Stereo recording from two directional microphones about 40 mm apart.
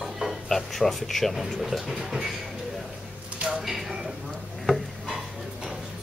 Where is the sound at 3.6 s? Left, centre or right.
Centre.